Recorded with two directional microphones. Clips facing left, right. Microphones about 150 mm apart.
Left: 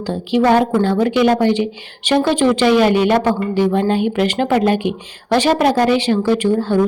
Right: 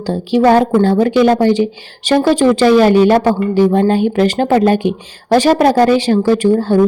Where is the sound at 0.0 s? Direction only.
40° right (ahead or behind).